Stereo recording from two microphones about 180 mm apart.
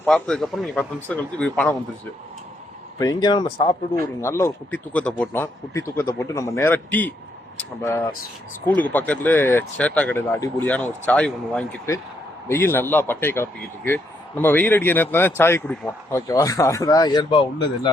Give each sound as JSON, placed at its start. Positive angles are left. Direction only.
{"t": 0.0, "sound": "a man's voice", "side_deg": 5}
{"t": 3.0, "sound": "speech", "side_deg": 20}
{"t": 4.2, "sound": "speech", "side_deg": 15}